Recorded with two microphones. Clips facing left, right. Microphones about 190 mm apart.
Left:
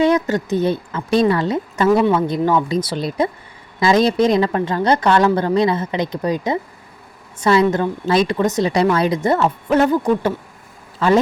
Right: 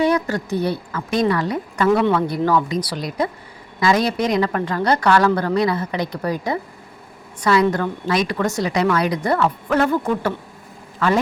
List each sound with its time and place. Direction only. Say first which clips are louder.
0.0 s a woman's voice: left 3 dB; 20° left (ahead or behind)